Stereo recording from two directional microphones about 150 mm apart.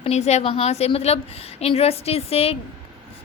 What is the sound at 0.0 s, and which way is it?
A woman's voice, 45° left (ahead or behind).